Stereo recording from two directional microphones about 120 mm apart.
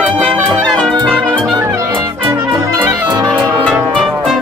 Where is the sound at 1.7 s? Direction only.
35° right (ahead or behind).